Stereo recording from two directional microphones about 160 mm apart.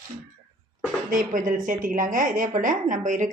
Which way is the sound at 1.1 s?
55° right (ahead or behind).